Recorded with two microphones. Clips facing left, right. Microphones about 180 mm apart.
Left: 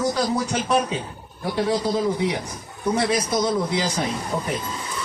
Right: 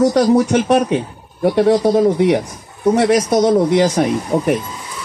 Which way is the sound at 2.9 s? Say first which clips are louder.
Right 8 dB; 80° right.